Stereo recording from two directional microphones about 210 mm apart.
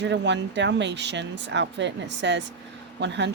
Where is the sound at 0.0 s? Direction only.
55° right (ahead or behind).